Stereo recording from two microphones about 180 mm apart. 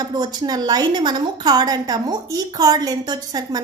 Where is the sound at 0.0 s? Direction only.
20° right (ahead or behind).